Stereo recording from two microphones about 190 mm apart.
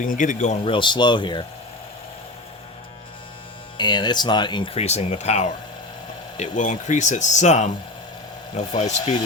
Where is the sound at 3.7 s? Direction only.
25° left (ahead or behind).